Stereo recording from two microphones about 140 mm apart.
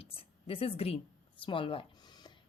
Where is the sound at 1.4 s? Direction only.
40° left (ahead or behind).